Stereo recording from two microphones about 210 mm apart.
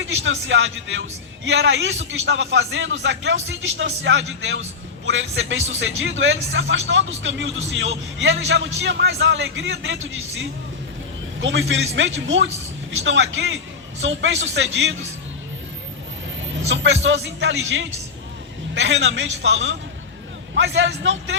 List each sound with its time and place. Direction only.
0.0 s speech: 65° right (ahead or behind)
16.6 s speech: 60° right (ahead or behind)